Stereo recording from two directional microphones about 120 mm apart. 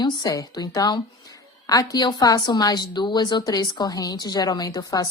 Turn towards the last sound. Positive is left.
turn(degrees=30)  # may be behind; listen again after turning